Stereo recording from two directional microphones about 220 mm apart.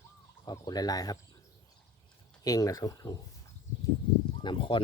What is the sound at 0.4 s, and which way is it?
Speech, 20° left (ahead or behind).